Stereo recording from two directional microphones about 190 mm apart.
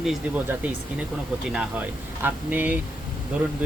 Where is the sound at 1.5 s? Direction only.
10° right (ahead or behind).